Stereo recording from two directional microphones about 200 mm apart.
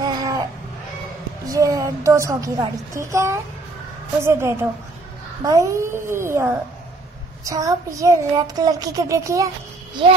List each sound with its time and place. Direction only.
0.0 s baby cry: 20° right (ahead or behind)
1.5 s child singing: 15° right (ahead or behind)
10.0 s speech: 25° right (ahead or behind)